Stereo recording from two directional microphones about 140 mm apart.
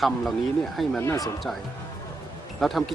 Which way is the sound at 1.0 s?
20° left (ahead or behind).